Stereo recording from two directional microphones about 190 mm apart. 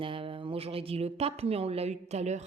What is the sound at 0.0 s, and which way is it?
Speech, 30° right (ahead or behind).